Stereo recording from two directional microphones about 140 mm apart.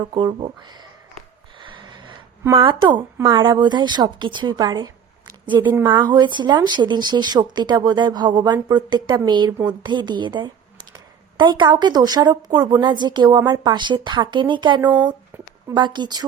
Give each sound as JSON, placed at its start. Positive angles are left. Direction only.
{"t": 0.1, "sound": "a woman's voice", "side_deg": -35}
{"t": 1.1, "sound": "a sound", "side_deg": -35}
{"t": 2.5, "sound": "a woman's voice", "side_deg": -40}